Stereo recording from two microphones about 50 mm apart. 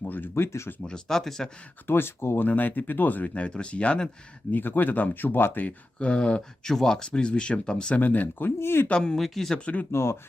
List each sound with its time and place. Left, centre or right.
0.0 s speech: left
0.8 s speech: centre
1.9 s speech: left
2.5 s speech: left
4.5 s speech: left
5.6 s speech: left
6.7 s speech: centre
8.0 s speech: left
8.5 s speech: left
8.9 s speech: centre
9.6 s speech: left
9.9 s speech: left